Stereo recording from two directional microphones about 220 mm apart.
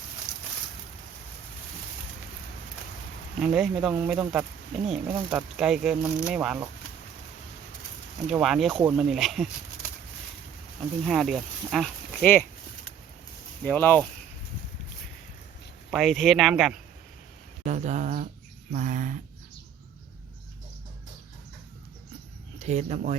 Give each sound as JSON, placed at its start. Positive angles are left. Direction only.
{"t": 3.4, "sound": "speech", "side_deg": -5}
{"t": 8.3, "sound": "speech", "side_deg": 0}
{"t": 11.0, "sound": "speech", "side_deg": 0}
{"t": 13.7, "sound": "speech", "side_deg": 10}
{"t": 15.9, "sound": "speech", "side_deg": 0}
{"t": 17.7, "sound": "speech", "side_deg": -30}
{"t": 22.5, "sound": "speech", "side_deg": -30}